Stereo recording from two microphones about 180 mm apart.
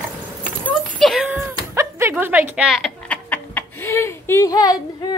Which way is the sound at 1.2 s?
10° right (ahead or behind).